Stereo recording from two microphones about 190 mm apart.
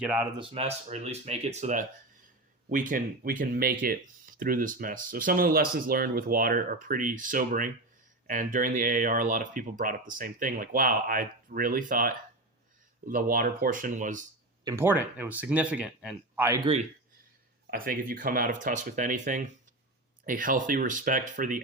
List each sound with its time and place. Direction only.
0.0 s speech: 10° right (ahead or behind)
0.3 s speech: 30° right (ahead or behind)
14.6 s speech: 15° right (ahead or behind)
17.7 s speech: 50° right (ahead or behind)